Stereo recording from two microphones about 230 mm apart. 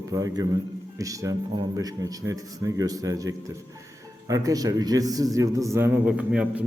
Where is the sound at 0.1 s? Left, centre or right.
Centre.